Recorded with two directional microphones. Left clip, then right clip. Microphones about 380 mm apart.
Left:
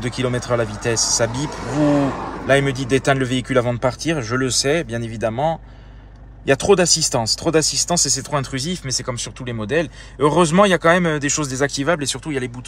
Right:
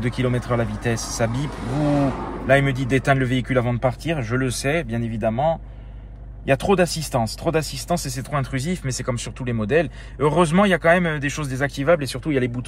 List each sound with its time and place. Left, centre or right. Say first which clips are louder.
0.0 s speech: left 2 dB; centre
1.7 s speech: left 4 dB; left
2.4 s speech: left 1 dB; centre